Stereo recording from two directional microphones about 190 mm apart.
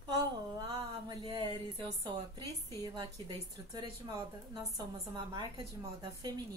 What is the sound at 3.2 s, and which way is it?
A woman's voice, 25° right (ahead or behind).